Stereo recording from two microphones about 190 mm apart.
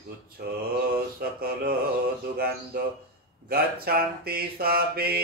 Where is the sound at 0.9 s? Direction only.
55° right (ahead or behind).